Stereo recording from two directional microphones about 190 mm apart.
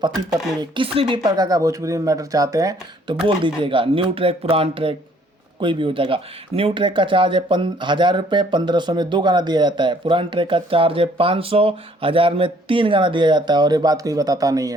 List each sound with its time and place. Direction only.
0.1 s speech: centre (ahead or behind)
0.6 s speech: 25° right (ahead or behind)